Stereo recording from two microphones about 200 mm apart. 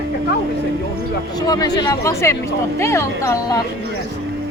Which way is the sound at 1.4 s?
20° left (ahead or behind).